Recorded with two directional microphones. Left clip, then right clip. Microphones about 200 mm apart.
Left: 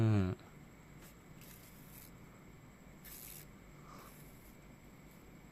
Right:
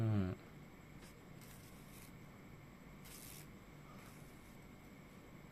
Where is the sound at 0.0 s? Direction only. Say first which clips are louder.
Left 6 dB; 30° left (ahead or behind).